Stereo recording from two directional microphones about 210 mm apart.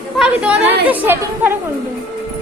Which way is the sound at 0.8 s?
10° right (ahead or behind).